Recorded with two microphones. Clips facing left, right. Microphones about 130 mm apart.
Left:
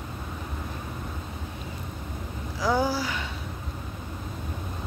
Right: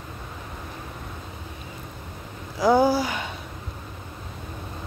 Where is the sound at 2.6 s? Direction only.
20° right (ahead or behind).